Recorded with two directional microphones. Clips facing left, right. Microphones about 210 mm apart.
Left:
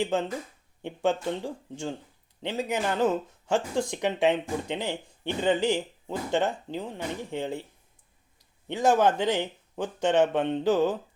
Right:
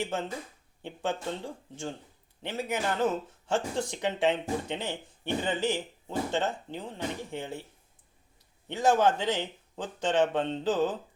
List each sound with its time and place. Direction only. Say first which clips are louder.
0.0 s speech: left 5 dB; 15° left (ahead or behind)
2.4 s speech: left 3 dB; 15° left (ahead or behind)
8.9 s speech: left 2 dB; 15° left (ahead or behind)